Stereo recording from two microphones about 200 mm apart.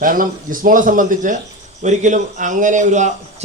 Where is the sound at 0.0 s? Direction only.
45° right (ahead or behind).